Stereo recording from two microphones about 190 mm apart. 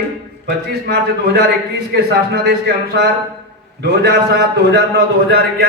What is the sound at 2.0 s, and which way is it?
Speech, 55° right (ahead or behind).